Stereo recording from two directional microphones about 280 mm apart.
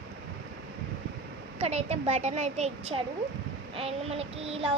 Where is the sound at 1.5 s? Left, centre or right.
Right.